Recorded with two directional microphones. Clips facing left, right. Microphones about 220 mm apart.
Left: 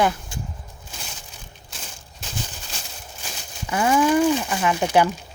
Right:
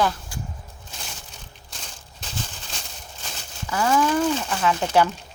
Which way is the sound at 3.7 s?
15° left (ahead or behind).